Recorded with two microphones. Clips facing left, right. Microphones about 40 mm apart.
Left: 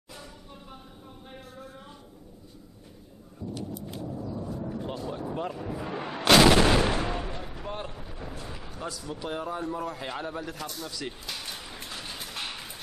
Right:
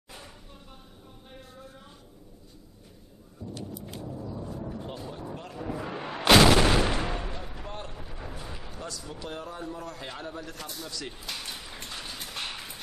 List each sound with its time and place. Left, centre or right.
3.4 s thunder: centre
3.9 s vehicle: centre
4.2 s a sound: centre
5.1 s vehicle: centre
5.6 s artillery fire: centre
9.0 s a man's voice: centre